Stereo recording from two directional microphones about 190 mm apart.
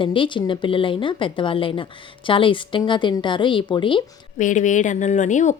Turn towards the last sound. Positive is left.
turn(degrees=40)  # may be behind; listen again after turning